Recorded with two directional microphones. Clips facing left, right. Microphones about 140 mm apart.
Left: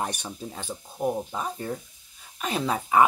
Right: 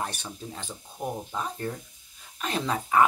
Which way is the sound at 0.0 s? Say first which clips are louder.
Left 3 dB; 15° left (ahead or behind).